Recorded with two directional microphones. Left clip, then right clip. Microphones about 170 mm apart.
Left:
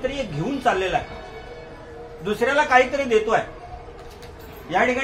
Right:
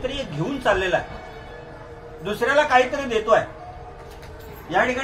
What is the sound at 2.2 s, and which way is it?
Speech, 25° left (ahead or behind).